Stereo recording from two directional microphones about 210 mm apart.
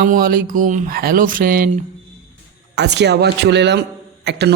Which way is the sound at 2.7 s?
55° right (ahead or behind).